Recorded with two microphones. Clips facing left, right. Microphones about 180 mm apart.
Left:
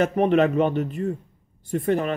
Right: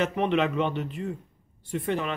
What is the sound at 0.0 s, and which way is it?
Speech, 45° left (ahead or behind).